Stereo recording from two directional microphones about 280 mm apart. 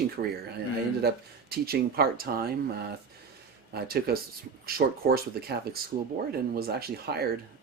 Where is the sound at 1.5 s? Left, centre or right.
Right.